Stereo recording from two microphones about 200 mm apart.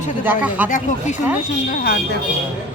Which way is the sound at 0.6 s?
40° left (ahead or behind).